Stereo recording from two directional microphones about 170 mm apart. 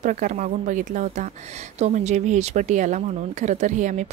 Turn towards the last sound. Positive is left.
turn(degrees=-45)  # may be behind; listen again after turning